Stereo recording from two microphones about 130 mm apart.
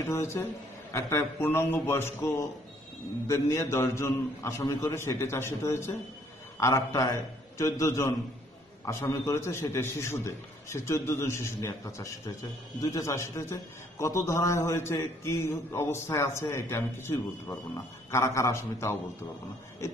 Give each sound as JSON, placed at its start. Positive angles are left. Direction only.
{"t": 0.0, "sound": "a man's voice", "side_deg": 20}
{"t": 3.3, "sound": "a man's voice", "side_deg": 25}